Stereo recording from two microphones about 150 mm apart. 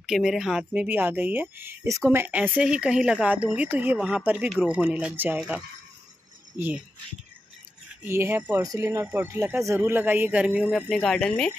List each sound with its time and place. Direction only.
0.0 s speech: centre (ahead or behind)
6.5 s speech: 15° right (ahead or behind)
8.0 s speech: 15° right (ahead or behind)
10.9 s speech: 5° left (ahead or behind)